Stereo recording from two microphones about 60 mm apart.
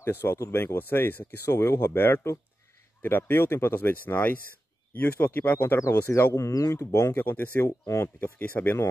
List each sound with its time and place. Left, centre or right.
0.0 s speech: left
5.8 s speech: left
7.2 s speech: left
7.6 s speech: left
8.2 s speech: left